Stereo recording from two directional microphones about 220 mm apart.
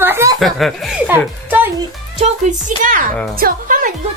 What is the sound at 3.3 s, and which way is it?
Music, 40° right (ahead or behind).